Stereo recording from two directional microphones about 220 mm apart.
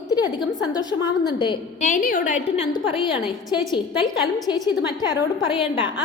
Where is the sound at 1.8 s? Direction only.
35° left (ahead or behind).